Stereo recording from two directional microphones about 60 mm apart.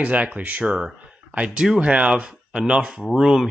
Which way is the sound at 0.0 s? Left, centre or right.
Right.